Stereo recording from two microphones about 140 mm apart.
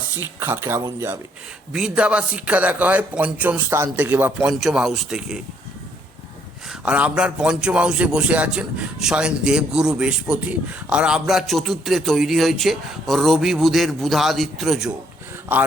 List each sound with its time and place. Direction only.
0.2 s a man's voice: 15° right (ahead or behind)
1.7 s a man's voice: 5° right (ahead or behind)
6.8 s a man's voice: 10° right (ahead or behind)